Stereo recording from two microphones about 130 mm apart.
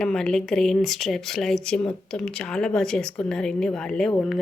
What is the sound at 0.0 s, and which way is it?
A woman's voice, 5° left (ahead or behind).